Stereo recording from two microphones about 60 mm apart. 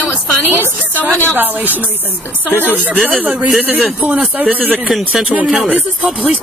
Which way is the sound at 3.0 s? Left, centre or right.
Right.